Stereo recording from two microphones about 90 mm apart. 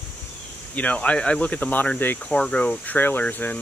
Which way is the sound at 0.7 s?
15° left (ahead or behind).